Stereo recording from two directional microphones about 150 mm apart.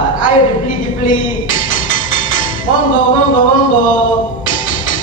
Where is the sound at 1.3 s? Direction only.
65° left (ahead or behind).